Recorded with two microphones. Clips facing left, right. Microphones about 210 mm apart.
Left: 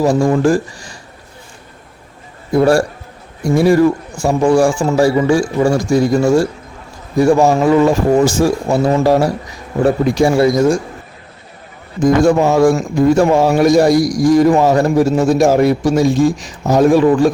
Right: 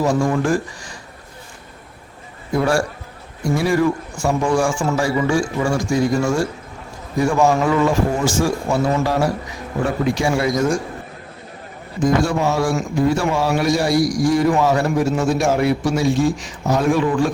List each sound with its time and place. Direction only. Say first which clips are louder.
0.0 s a man's voice: left 6 dB; 35° left (ahead or behind)
2.6 s a man's voice: left 7 dB; 35° left (ahead or behind)
4.2 s a man's voice: left 7 dB; 35° left (ahead or behind)
12.0 s a man's voice: left 7 dB; 50° left (ahead or behind)